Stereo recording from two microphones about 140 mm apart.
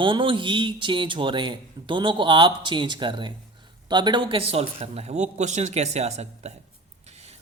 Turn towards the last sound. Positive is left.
turn(degrees=-50)  # may be behind; listen again after turning